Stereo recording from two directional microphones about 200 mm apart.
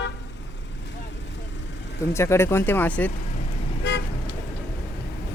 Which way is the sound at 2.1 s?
15° left (ahead or behind).